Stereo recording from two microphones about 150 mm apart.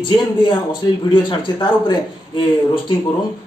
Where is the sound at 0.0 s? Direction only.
30° left (ahead or behind).